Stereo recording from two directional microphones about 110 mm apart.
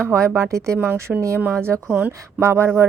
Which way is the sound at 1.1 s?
5° right (ahead or behind).